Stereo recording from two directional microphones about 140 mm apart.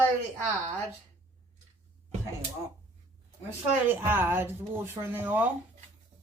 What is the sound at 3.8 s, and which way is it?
Speech, 15° right (ahead or behind).